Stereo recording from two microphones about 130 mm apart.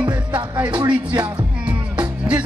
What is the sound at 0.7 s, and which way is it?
Speech, 35° right (ahead or behind).